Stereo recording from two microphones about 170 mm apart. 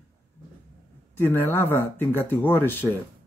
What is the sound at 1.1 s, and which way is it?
Speech, 15° left (ahead or behind).